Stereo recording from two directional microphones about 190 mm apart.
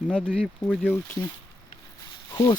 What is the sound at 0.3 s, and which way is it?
Speech, 5° left (ahead or behind).